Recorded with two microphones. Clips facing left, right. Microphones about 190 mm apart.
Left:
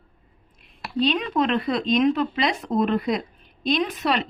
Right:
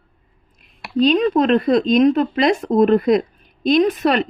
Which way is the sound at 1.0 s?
40° right (ahead or behind).